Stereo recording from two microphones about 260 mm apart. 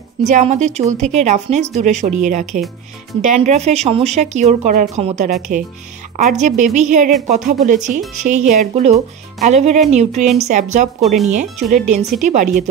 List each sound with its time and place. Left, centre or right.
0.2 s speech: right